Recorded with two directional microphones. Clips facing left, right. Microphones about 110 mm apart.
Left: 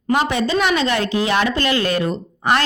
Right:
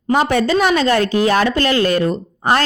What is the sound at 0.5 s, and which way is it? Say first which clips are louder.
A woman's voice: right 3 dB; 40° right (ahead or behind).